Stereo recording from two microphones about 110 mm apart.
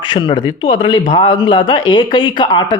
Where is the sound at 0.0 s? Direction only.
45° left (ahead or behind).